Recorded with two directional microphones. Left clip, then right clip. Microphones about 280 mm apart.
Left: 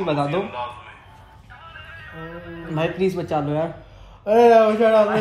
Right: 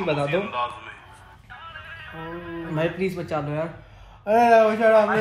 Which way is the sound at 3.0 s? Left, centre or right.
Centre.